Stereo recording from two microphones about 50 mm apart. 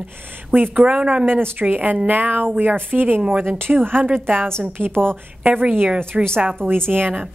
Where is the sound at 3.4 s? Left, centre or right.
Right.